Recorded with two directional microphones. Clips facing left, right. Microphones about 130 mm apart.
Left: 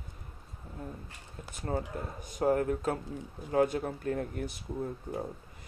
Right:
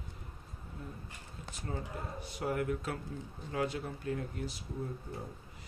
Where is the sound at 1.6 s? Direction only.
45° left (ahead or behind).